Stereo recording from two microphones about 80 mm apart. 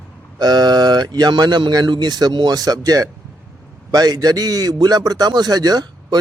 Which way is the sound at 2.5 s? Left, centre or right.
Right.